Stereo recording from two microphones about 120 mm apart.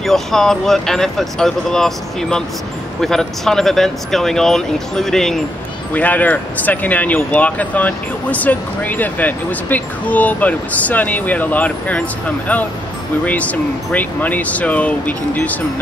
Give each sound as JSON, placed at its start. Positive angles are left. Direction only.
{"t": 0.0, "sound": "speech", "side_deg": 5}
{"t": 5.9, "sound": "speech", "side_deg": 15}